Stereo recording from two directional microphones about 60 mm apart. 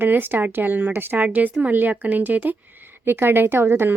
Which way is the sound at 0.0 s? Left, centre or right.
Right.